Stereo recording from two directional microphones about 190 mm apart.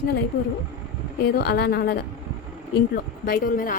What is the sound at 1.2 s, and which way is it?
Speech, 60° left (ahead or behind).